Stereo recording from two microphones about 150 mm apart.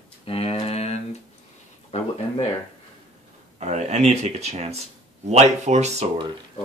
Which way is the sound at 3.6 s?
50° right (ahead or behind).